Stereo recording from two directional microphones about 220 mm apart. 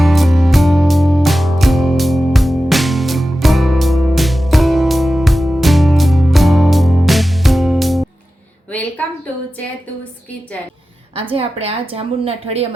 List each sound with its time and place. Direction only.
0.0 s music: centre (ahead or behind)
11.1 s a woman's voice: 25° right (ahead or behind)